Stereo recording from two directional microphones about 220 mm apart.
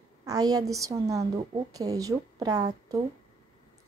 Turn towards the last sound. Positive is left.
turn(degrees=-15)  # may be behind; listen again after turning